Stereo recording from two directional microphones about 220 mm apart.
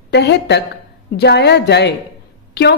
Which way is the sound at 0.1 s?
50° left (ahead or behind).